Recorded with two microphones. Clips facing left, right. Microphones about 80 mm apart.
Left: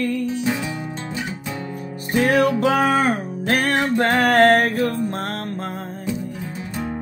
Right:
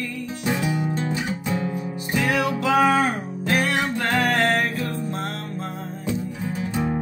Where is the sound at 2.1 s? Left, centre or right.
Left.